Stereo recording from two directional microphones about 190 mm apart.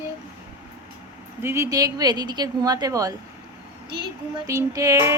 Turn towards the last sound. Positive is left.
turn(degrees=-15)  # may be behind; listen again after turning